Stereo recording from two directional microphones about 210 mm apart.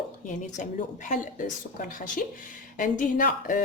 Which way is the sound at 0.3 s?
35° left (ahead or behind).